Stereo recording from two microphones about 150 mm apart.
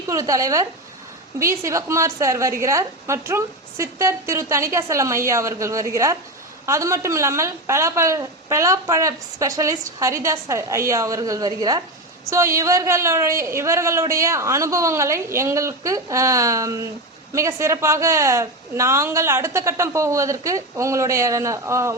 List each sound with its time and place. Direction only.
0.1 s a woman's voice: 20° right (ahead or behind)